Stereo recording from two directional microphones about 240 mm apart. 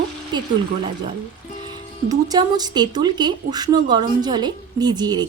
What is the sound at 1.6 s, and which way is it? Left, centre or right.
Speech, centre.